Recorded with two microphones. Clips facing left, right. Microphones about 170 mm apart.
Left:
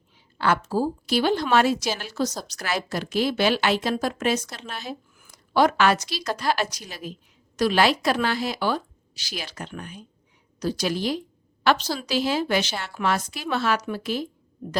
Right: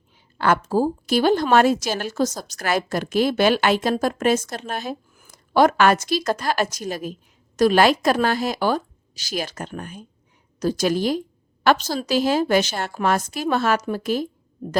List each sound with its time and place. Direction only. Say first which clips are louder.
0.3 s a woman's voice: right 4 dB; 50° right (ahead or behind)